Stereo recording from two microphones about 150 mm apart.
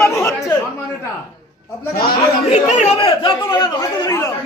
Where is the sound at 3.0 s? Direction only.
35° left (ahead or behind).